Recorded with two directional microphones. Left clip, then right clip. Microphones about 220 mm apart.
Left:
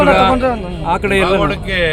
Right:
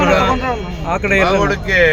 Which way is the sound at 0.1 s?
10° left (ahead or behind).